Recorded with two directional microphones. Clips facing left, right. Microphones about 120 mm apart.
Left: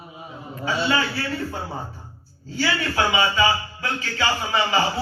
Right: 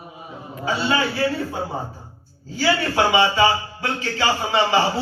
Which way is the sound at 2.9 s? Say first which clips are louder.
Right 3 dB; 30° right (ahead or behind).